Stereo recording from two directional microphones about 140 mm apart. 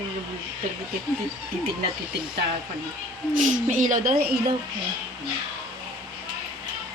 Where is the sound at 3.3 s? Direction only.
65° right (ahead or behind).